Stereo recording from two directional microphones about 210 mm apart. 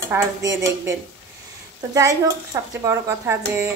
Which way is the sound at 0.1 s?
15° right (ahead or behind).